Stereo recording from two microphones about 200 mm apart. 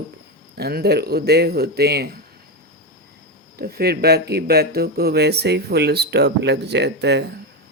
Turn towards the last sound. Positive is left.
turn(degrees=-60)  # may be behind; listen again after turning